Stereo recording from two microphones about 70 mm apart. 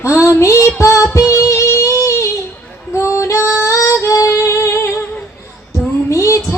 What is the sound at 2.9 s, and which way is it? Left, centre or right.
Female singing, left.